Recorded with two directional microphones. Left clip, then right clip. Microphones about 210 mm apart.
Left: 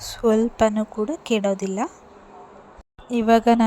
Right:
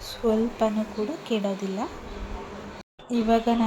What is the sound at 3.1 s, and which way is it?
Speech, 45° left (ahead or behind).